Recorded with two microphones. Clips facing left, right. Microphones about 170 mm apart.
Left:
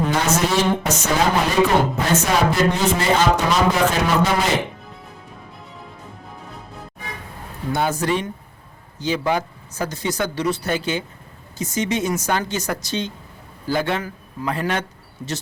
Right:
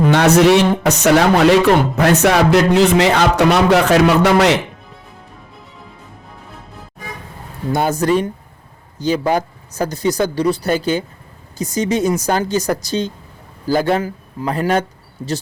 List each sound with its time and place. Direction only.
0.1 s a man's voice: 70° right (ahead or behind)
7.7 s speech: 40° right (ahead or behind)